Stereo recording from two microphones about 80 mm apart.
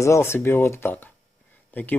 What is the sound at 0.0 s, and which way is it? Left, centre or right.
Speech, left.